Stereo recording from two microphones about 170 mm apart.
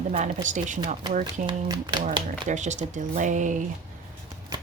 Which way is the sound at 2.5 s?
45° right (ahead or behind).